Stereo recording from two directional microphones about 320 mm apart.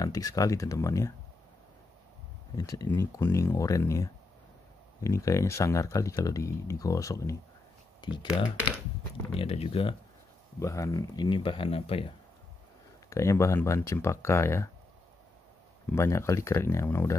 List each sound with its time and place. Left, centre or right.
0.0 s speech: centre
2.5 s speech: centre
9.3 s speech: centre
13.1 s speech: centre
15.9 s speech: centre